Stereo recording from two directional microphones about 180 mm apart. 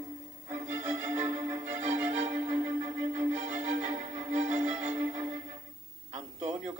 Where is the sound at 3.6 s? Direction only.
40° right (ahead or behind).